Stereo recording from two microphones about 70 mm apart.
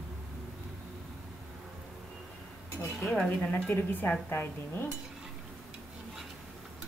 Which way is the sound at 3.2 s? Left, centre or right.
Centre.